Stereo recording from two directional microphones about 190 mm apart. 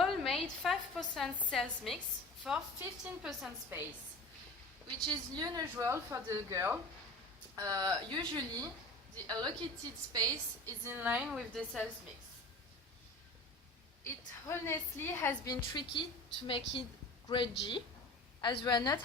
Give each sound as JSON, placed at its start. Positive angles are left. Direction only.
{"t": 0.0, "sound": "a woman's voice", "side_deg": 0}
{"t": 3.7, "sound": "a woman's voice", "side_deg": -10}
{"t": 5.0, "sound": "a woman's voice", "side_deg": -20}
{"t": 14.0, "sound": "a woman's voice", "side_deg": 15}
{"t": 15.7, "sound": "a woman's voice", "side_deg": 25}